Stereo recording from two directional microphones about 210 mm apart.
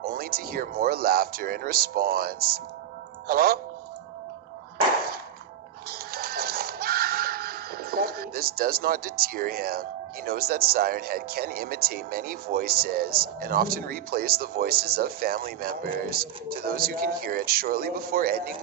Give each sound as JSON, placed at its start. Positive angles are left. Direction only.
{"t": 0.1, "sound": "speech", "side_deg": -45}
{"t": 5.9, "sound": "printer", "side_deg": -45}
{"t": 10.2, "sound": "speech", "side_deg": -45}